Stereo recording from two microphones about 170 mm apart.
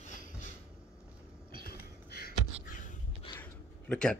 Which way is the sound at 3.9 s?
5° left (ahead or behind).